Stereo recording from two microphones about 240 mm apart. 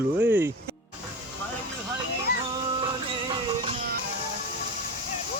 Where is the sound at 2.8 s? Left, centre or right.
Right.